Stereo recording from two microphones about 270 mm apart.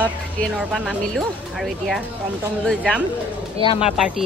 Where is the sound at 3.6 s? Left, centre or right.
Left.